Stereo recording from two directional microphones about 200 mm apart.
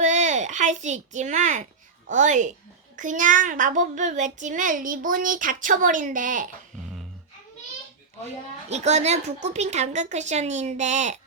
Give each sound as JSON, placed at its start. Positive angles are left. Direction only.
{"t": 0.0, "sound": "a sound", "side_deg": -35}
{"t": 2.0, "sound": "a child's voice", "side_deg": -40}
{"t": 8.7, "sound": "a child's voice", "side_deg": -35}